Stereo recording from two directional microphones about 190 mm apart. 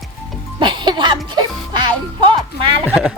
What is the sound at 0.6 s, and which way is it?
Music, 25° right (ahead or behind).